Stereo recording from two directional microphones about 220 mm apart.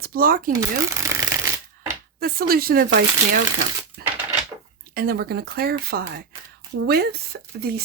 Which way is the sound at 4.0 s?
45° right (ahead or behind).